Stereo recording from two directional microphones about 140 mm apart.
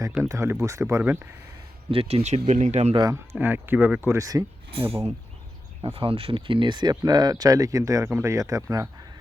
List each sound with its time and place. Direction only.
0.2 s speech: 20° right (ahead or behind)
1.9 s speech: 45° right (ahead or behind)
2.9 s speech: 30° right (ahead or behind)
3.3 s speech: 15° right (ahead or behind)
4.7 s speech: 45° right (ahead or behind); by 8.9 s 25° right (ahead or behind)